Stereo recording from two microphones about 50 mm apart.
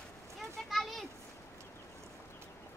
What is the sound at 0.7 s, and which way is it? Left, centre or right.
Children playing, centre.